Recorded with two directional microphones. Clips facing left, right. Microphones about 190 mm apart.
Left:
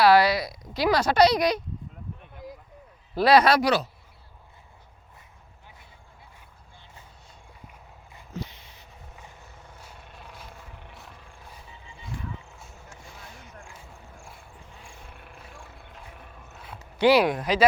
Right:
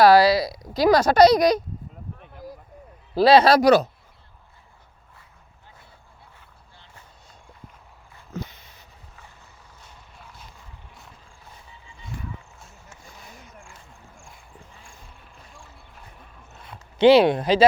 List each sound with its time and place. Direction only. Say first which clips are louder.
0.0 s speech: right 4 dB; 35° right (ahead or behind)
2.3 s a sound: right 3 dB; centre (ahead or behind)
3.2 s speech: right 4 dB; 30° right (ahead or behind)
8.3 s dog: right 2 dB; 45° right (ahead or behind)
17.0 s speech: right 5 dB; 25° right (ahead or behind)